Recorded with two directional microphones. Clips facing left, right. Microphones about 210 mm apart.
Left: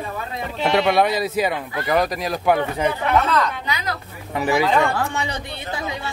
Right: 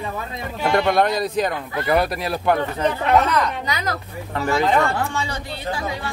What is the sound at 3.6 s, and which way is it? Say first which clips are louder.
Speech: right 1 dB; 40° right (ahead or behind).